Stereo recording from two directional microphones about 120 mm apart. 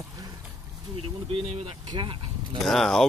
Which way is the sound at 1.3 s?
55° right (ahead or behind).